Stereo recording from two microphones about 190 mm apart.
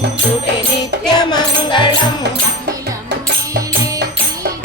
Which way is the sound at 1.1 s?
20° left (ahead or behind).